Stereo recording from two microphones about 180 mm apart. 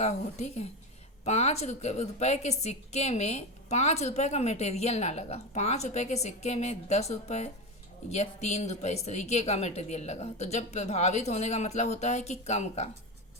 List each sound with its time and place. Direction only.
0.0 s a woman's voice: 40° left (ahead or behind)